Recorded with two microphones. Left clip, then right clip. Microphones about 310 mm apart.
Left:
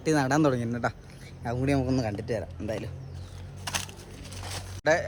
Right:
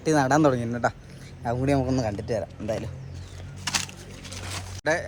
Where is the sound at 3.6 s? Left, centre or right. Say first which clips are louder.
Right 5 dB; centre.